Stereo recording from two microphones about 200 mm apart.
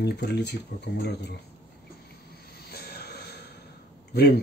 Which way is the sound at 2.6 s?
55° left (ahead or behind).